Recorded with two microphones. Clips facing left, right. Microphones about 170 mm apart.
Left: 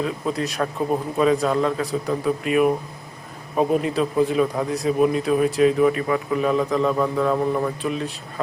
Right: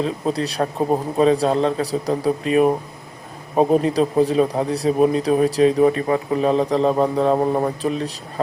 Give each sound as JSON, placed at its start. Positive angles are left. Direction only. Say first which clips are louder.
{"t": 0.0, "sound": "speech", "louder": "right 3 dB", "side_deg": -35}